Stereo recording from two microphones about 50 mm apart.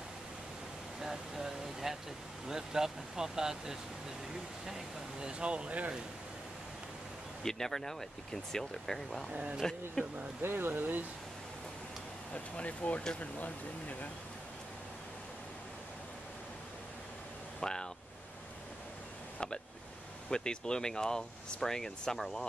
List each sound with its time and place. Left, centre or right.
1.0 s speech: centre
5.4 s speech: right
7.4 s speech: centre
9.3 s speech: right
9.6 s speech: centre
10.4 s speech: right
12.5 s speech: left
17.6 s a sound: centre
20.2 s speech: centre